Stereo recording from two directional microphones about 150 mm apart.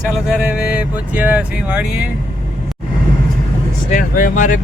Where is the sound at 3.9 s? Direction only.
65° left (ahead or behind).